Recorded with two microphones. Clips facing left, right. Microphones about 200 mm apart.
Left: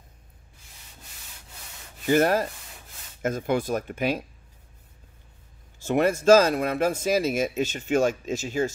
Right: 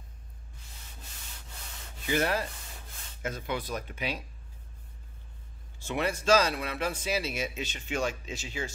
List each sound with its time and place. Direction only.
2.0 s speech: 45° left (ahead or behind)
5.8 s speech: 45° left (ahead or behind)